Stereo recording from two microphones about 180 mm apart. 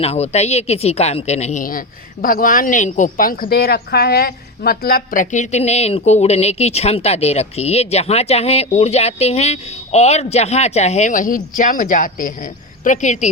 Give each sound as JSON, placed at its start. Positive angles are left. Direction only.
{"t": 0.0, "sound": "a woman's voice", "side_deg": 35}